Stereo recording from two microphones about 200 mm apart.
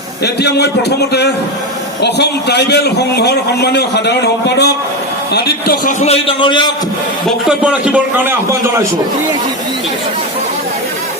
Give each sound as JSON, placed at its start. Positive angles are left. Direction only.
{"t": 0.4, "sound": "a man's voice", "side_deg": 55}
{"t": 6.0, "sound": "a man's voice", "side_deg": 30}
{"t": 7.4, "sound": "a man's voice", "side_deg": -5}